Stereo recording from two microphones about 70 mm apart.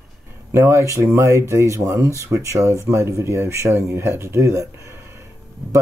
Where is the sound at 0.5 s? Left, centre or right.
Right.